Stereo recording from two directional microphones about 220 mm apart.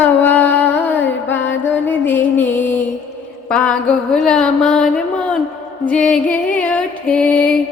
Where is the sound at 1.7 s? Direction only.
10° left (ahead or behind).